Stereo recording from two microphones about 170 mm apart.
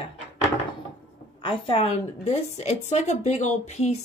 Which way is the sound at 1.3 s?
30° left (ahead or behind).